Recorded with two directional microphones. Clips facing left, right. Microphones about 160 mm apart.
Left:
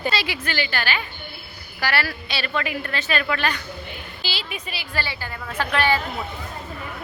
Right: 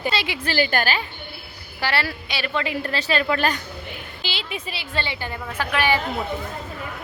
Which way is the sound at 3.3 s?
40° right (ahead or behind).